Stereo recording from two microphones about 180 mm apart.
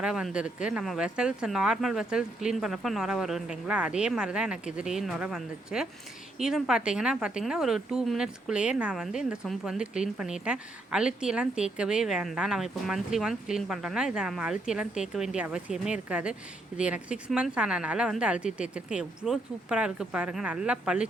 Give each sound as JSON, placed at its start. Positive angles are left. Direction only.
{"t": 0.0, "sound": "a woman's voice", "side_deg": -5}